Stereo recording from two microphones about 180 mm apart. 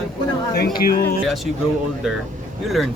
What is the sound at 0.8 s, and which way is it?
Speech, 55° left (ahead or behind).